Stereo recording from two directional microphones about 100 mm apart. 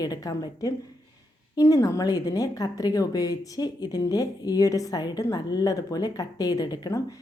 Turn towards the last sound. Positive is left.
turn(degrees=40)  # may be behind; listen again after turning